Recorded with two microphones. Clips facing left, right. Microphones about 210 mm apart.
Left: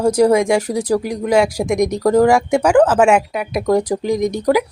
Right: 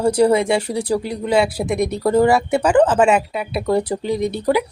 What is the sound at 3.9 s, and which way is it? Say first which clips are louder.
Speech: left 3 dB; 10° left (ahead or behind).